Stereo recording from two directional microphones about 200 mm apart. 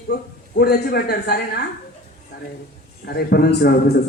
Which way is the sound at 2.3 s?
50° left (ahead or behind).